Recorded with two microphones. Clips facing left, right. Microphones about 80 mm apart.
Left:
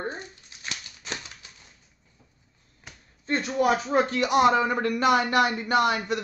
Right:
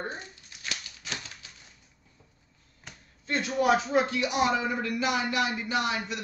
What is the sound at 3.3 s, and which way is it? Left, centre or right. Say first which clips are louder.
Speech: left 1 dB; left.